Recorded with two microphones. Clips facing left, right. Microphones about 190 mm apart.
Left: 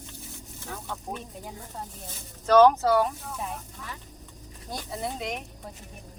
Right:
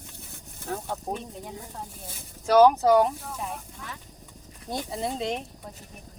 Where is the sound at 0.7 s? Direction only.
45° right (ahead or behind).